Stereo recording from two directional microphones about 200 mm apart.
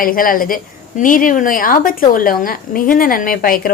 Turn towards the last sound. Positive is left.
turn(degrees=45)  # may be behind; listen again after turning